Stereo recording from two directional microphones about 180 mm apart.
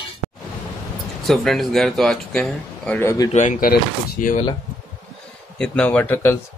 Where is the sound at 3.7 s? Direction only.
55° left (ahead or behind).